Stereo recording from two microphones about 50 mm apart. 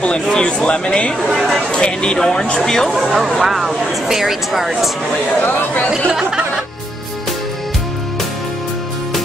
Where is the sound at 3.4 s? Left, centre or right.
Centre.